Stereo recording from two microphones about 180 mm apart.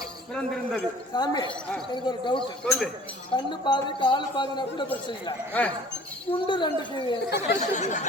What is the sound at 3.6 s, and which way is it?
A man's voice, 25° left (ahead or behind).